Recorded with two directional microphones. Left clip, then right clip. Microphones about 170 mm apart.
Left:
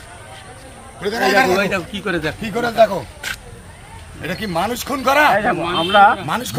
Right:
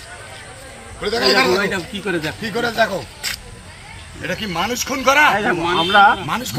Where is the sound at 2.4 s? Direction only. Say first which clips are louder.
Left 5 dB; 75° left (ahead or behind).